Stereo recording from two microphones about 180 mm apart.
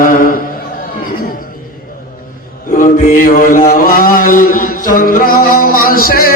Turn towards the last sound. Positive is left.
turn(degrees=55)  # may be behind; listen again after turning